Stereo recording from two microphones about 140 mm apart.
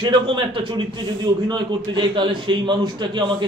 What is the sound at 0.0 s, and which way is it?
A man's voice, 35° right (ahead or behind).